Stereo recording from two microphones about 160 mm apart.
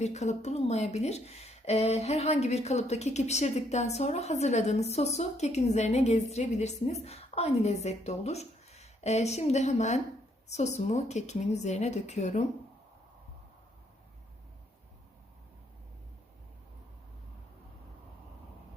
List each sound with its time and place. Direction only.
0.0 s speech: 45° left (ahead or behind)